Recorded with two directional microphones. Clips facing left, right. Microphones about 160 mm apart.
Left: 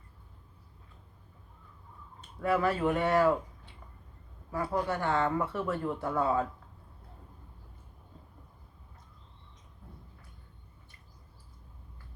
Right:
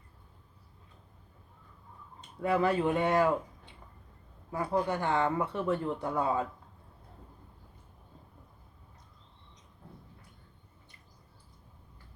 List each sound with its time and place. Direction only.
2.4 s speech: 20° right (ahead or behind)
4.5 s speech: 15° right (ahead or behind)